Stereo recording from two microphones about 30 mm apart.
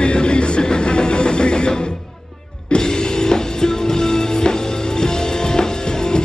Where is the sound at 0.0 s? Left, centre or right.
Left.